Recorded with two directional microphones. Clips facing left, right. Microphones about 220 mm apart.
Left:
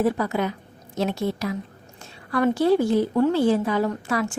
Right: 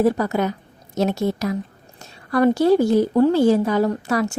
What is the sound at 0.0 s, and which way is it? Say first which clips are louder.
A woman's voice: right 4 dB; 40° right (ahead or behind).